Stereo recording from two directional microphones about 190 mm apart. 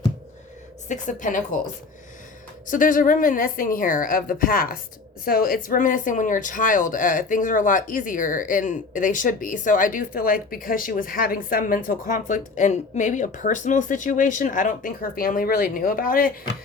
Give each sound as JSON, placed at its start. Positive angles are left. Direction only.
{"t": 0.9, "sound": "speech", "side_deg": 40}
{"t": 2.6, "sound": "speech", "side_deg": 45}